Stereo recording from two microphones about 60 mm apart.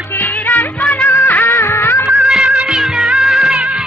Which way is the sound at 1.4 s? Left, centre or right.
Left.